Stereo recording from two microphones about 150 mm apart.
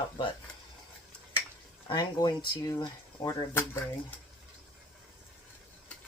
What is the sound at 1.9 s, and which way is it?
Speech, 30° left (ahead or behind).